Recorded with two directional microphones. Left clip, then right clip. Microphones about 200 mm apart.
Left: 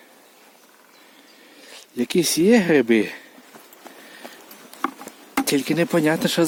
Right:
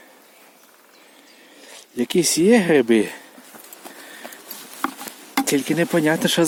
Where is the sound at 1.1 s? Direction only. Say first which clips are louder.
Right 1 dB; centre (ahead or behind).